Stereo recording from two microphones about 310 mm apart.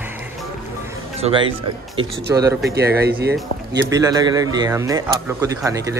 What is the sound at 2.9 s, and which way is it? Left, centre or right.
Speech, right.